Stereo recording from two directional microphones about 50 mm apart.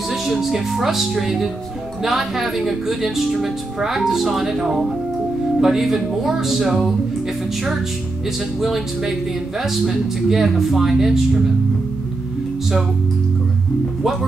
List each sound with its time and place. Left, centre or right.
0.3 s speech: centre
8.5 s speech: centre